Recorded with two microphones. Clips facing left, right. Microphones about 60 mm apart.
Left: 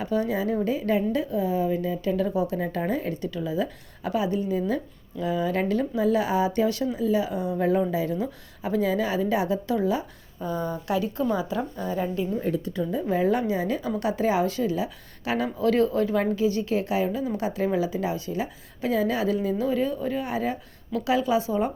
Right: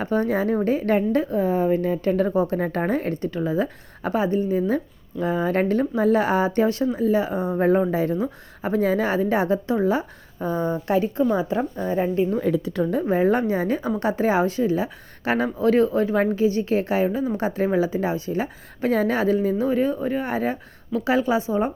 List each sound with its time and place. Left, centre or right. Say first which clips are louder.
0.0 s a woman's voice: right 4 dB; right
12.3 s a woman's voice: right 5 dB; right
13.1 s a woman's voice: right 2 dB; right